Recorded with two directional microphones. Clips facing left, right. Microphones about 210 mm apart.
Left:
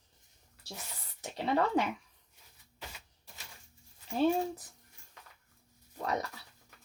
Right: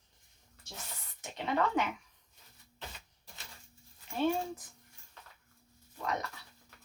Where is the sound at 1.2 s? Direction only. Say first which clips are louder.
Left 2 dB; 35° left (ahead or behind).